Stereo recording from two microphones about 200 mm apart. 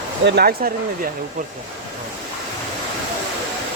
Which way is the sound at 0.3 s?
50° right (ahead or behind).